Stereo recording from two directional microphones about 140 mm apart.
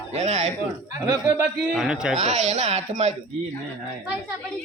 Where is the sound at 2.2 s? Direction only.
50° right (ahead or behind).